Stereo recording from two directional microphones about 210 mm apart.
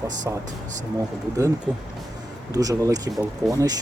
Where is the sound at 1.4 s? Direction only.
15° right (ahead or behind).